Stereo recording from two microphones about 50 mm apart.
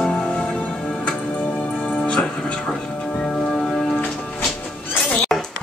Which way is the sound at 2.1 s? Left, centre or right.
Centre.